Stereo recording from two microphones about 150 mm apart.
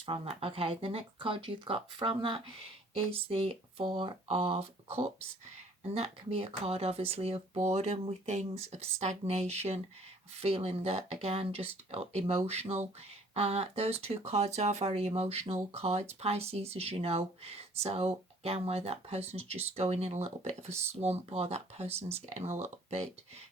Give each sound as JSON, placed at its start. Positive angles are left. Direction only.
{"t": 0.0, "sound": "speech", "side_deg": -40}